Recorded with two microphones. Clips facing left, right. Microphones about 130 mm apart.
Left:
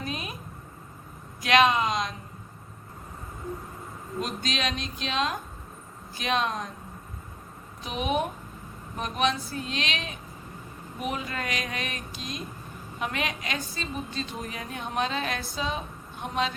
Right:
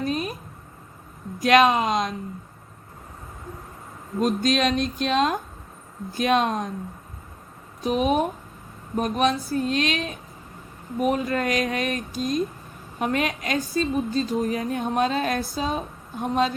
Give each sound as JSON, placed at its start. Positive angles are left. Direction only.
{"t": 0.0, "sound": "a sound", "side_deg": -45}
{"t": 1.4, "sound": "a woman's voice", "side_deg": -45}
{"t": 4.2, "sound": "a woman's voice", "side_deg": -50}
{"t": 7.9, "sound": "a woman's voice", "side_deg": -40}